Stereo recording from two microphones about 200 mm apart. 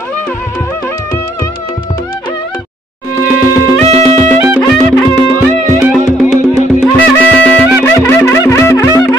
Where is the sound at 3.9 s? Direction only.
30° right (ahead or behind).